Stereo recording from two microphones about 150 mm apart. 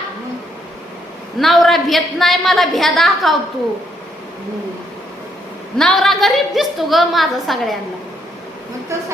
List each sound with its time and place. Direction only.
1.4 s a woman's voice: centre (ahead or behind)
5.7 s a woman's voice: centre (ahead or behind)